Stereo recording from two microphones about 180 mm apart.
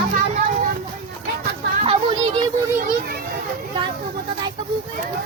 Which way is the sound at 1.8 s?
30° right (ahead or behind).